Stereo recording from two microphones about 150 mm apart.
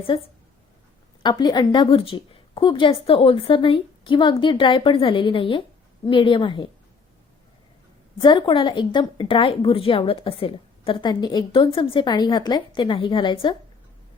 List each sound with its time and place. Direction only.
0.0 s a woman's voice: 35° left (ahead or behind)
8.2 s a woman's voice: 30° left (ahead or behind)